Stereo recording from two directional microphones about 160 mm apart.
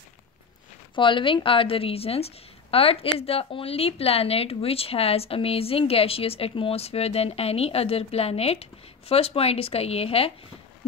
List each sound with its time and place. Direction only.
0.9 s a woman's voice: 30° left (ahead or behind)